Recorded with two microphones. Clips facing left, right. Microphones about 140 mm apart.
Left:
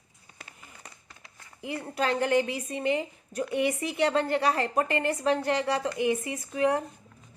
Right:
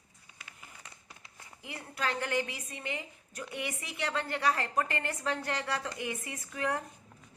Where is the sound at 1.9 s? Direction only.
25° left (ahead or behind).